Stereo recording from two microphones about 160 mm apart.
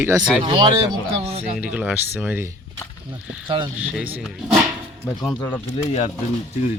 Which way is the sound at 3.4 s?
30° right (ahead or behind).